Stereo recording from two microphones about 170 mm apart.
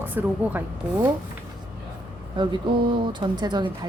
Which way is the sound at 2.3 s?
25° right (ahead or behind).